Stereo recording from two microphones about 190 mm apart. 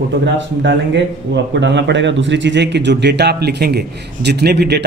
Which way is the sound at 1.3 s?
70° right (ahead or behind).